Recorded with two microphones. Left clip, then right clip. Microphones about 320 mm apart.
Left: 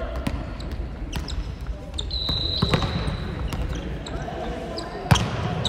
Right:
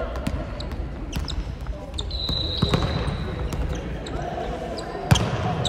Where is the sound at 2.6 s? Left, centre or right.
Left.